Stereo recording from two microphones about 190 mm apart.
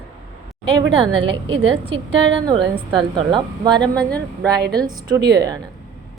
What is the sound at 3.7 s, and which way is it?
Speech, 5° left (ahead or behind).